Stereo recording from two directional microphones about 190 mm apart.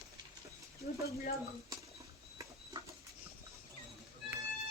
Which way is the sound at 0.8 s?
55° left (ahead or behind).